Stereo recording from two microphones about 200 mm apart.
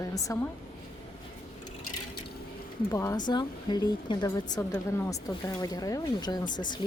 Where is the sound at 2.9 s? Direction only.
15° left (ahead or behind).